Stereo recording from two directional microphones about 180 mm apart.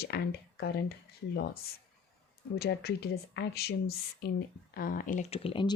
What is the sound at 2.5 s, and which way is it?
Speech, 60° left (ahead or behind).